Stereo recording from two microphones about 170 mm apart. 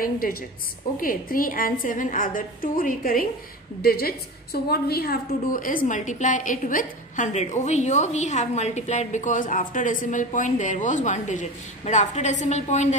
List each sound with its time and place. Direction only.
0.0 s a woman's voice: 60° left (ahead or behind); by 12.9 s 45° left (ahead or behind)